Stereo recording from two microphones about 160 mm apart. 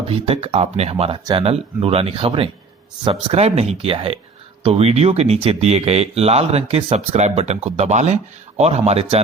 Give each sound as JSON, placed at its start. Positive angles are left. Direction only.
{"t": 0.1, "sound": "speech", "side_deg": -40}